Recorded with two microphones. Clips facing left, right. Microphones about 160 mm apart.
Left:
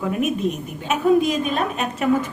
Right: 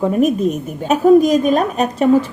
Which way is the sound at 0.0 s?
35° right (ahead or behind).